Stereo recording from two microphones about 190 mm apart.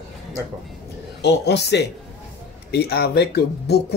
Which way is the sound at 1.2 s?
60° left (ahead or behind).